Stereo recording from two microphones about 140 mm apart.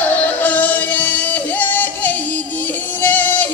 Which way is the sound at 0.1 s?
10° left (ahead or behind).